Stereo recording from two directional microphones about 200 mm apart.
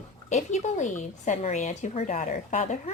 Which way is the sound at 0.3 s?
35° left (ahead or behind).